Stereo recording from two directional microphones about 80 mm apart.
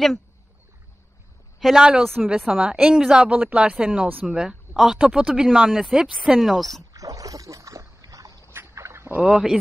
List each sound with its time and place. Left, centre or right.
1.6 s a woman's voice: centre
6.7 s rowboat: right
8.5 s a sound: right
9.2 s a woman's voice: centre